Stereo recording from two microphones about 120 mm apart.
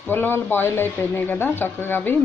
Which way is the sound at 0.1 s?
15° left (ahead or behind).